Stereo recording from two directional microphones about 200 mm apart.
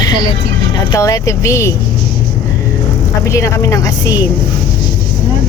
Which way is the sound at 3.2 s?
15° left (ahead or behind).